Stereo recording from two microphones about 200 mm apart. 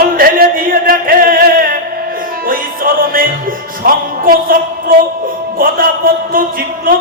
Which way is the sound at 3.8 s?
45° right (ahead or behind).